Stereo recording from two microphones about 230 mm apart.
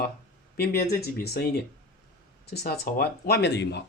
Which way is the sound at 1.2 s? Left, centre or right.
Left.